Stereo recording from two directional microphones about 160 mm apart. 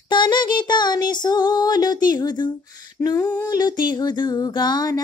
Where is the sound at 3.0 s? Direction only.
15° left (ahead or behind).